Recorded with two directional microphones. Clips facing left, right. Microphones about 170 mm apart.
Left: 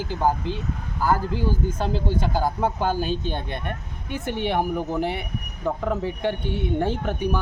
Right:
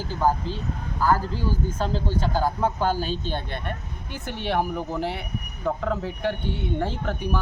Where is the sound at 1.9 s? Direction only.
15° left (ahead or behind).